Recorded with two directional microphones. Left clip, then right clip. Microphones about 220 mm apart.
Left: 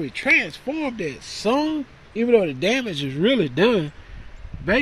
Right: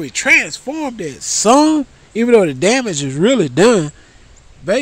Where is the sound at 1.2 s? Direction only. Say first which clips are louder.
Right 12 dB; 35° right (ahead or behind).